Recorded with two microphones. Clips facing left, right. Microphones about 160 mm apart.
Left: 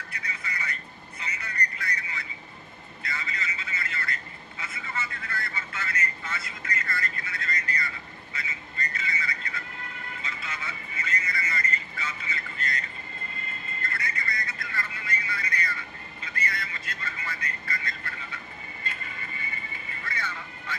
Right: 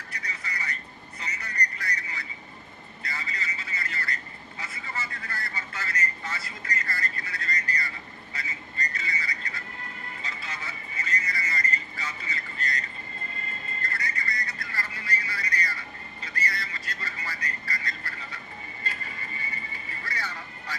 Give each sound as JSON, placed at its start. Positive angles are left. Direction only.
{"t": 0.3, "sound": "vehicle", "side_deg": -35}
{"t": 13.8, "sound": "vehicle", "side_deg": -35}
{"t": 16.2, "sound": "a sound", "side_deg": -40}
{"t": 19.9, "sound": "vehicle", "side_deg": -35}